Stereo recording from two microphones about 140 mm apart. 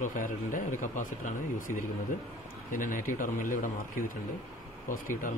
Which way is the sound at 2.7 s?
70° left (ahead or behind).